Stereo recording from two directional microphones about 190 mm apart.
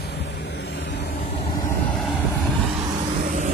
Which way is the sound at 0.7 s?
60° left (ahead or behind).